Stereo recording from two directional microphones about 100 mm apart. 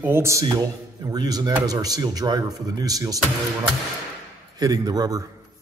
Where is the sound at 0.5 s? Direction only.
40° right (ahead or behind).